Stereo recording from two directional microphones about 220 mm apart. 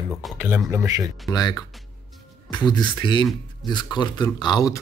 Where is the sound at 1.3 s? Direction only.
20° left (ahead or behind).